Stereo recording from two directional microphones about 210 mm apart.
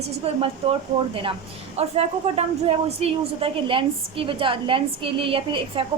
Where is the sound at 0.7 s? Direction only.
25° right (ahead or behind).